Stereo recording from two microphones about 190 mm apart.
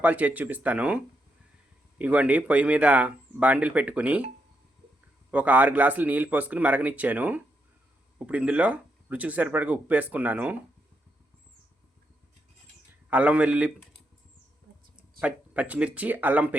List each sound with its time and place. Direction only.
0.0 s speech: 10° right (ahead or behind)
5.3 s speech: 10° right (ahead or behind)
13.1 s speech: 5° right (ahead or behind)
15.2 s speech: 5° right (ahead or behind)